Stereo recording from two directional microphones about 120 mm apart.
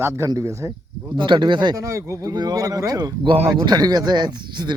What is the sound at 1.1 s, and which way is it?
Speech, 40° right (ahead or behind).